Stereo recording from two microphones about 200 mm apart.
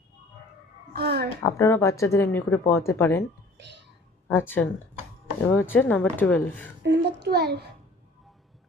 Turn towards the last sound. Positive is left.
turn(degrees=-55)  # may be behind; listen again after turning